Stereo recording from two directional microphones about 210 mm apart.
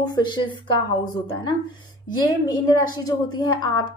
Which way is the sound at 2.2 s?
20° left (ahead or behind).